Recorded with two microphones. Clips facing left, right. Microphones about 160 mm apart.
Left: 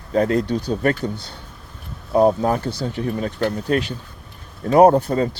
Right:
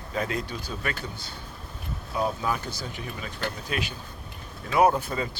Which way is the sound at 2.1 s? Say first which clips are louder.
Left 12 dB; 40° left (ahead or behind).